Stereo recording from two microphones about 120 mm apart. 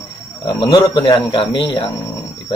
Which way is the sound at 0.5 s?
40° left (ahead or behind).